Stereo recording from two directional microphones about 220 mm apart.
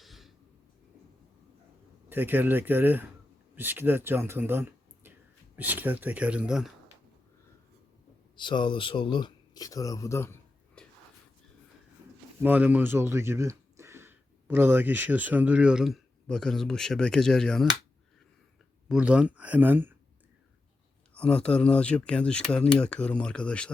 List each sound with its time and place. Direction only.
0.0 s a sound: centre (ahead or behind)
2.0 s speech: 10° right (ahead or behind)
8.4 s speech: 20° left (ahead or behind)
12.4 s speech: 10° right (ahead or behind)
18.9 s speech: 5° right (ahead or behind)
21.2 s speech: 5° left (ahead or behind)